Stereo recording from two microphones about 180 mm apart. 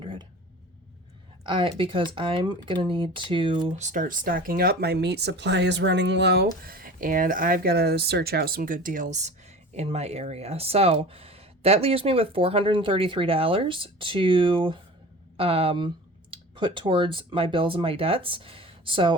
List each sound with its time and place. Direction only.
0.0 s a sound: 25° right (ahead or behind)
1.5 s speech: 30° right (ahead or behind)
3.8 s speech: 45° right (ahead or behind); by 19.1 s 30° right (ahead or behind)